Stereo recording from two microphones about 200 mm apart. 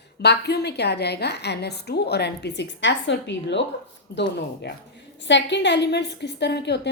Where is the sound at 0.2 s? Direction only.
55° left (ahead or behind).